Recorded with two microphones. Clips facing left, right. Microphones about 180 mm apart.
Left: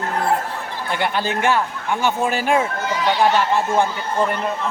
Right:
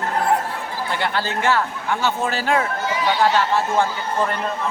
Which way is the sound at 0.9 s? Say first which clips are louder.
Left 3 dB; 15° left (ahead or behind).